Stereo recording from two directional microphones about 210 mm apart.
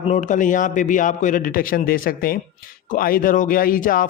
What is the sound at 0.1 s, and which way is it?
A man's voice, 35° left (ahead or behind).